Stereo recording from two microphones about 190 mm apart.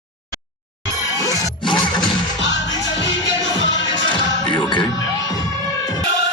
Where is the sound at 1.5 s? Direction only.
25° left (ahead or behind).